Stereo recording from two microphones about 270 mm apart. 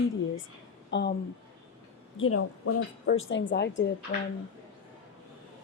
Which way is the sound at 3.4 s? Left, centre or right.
Left.